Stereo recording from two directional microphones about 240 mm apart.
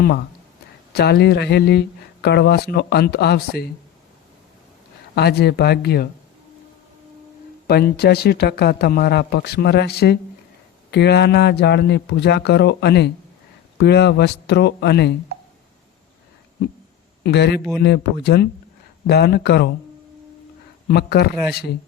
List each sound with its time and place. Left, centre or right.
0.9 s speech: left
5.1 s speech: left
7.7 s speech: left
17.2 s speech: left
20.8 s a man's voice: left